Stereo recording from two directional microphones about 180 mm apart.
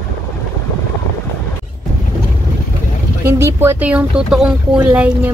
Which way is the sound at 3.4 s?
15° right (ahead or behind).